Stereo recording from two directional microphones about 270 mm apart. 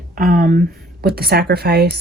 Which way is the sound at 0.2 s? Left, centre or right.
Right.